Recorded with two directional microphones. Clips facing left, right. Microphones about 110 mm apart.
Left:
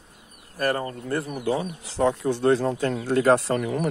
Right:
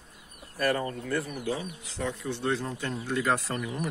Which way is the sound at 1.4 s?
60° left (ahead or behind).